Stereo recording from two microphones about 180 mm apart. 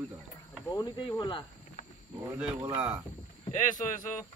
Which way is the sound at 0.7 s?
25° left (ahead or behind).